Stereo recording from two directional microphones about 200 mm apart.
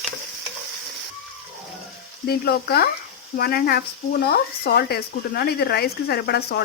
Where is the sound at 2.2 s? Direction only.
50° left (ahead or behind).